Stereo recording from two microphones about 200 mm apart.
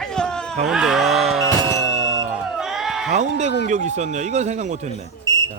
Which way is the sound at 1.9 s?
90° right.